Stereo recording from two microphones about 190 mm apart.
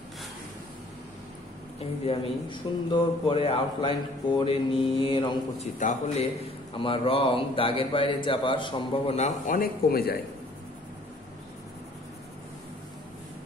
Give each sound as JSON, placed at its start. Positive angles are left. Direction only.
{"t": 1.8, "sound": "a man's voice", "side_deg": 30}
{"t": 5.8, "sound": "speech", "side_deg": 40}
{"t": 6.7, "sound": "a man's voice", "side_deg": 25}